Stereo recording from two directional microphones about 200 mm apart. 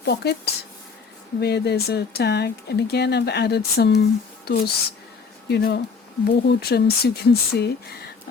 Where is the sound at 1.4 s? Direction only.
55° left (ahead or behind).